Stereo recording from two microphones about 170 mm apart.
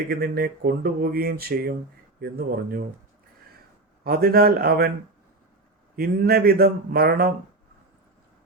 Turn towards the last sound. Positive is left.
turn(degrees=-65)  # may be behind; listen again after turning